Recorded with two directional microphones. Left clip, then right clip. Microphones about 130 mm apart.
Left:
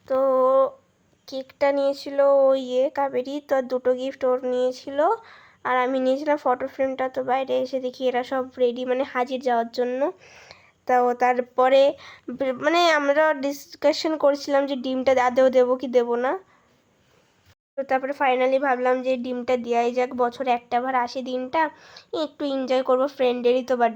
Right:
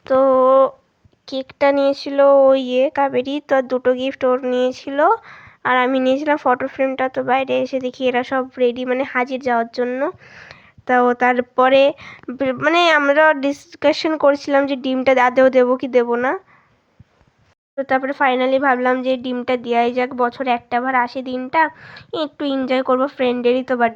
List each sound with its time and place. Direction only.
0.0 s a sound: 30° right (ahead or behind)
1.3 s speech: 30° right (ahead or behind); by 10.5 s 10° right (ahead or behind)
10.5 s speech: 30° right (ahead or behind)
17.7 s speech: 30° right (ahead or behind)